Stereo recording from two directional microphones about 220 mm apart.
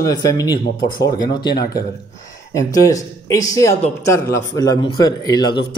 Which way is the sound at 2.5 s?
15° left (ahead or behind).